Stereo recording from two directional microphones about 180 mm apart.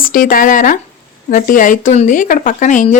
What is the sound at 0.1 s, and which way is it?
Speech, 50° left (ahead or behind).